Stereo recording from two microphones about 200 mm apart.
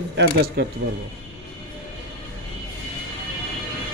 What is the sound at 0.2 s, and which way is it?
Speech, 55° right (ahead or behind).